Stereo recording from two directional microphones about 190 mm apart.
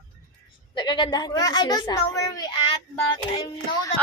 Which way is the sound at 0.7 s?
25° left (ahead or behind).